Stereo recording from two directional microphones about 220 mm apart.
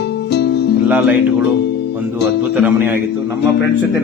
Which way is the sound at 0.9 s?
5° right (ahead or behind).